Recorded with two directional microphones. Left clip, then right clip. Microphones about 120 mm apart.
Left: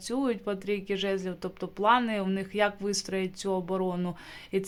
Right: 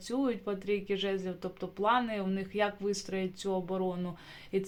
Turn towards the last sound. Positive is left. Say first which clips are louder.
# left 3 dB
turn(degrees=35)  # may be behind; listen again after turning